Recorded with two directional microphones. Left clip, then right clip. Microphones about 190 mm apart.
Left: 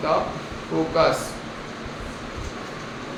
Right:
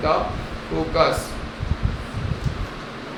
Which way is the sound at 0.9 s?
15° right (ahead or behind).